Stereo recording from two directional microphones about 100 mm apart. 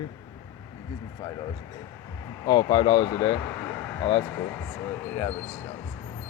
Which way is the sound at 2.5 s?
40° left (ahead or behind).